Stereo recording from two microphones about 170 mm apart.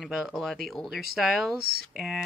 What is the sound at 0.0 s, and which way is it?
Speech, centre (ahead or behind).